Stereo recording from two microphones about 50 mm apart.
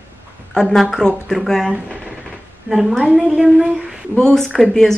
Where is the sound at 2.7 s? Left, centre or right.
Centre.